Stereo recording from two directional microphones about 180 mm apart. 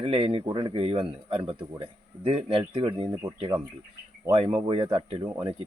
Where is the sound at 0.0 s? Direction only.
30° right (ahead or behind).